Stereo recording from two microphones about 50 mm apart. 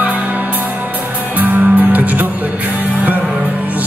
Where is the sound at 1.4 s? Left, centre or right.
Right.